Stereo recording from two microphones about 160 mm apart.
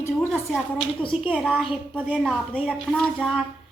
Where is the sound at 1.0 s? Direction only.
35° left (ahead or behind).